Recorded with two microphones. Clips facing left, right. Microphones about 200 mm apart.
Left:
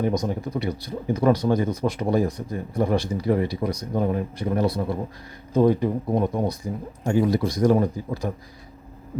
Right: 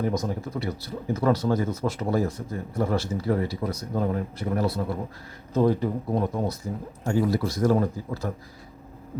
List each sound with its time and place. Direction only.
0.0 s speech: 20° left (ahead or behind)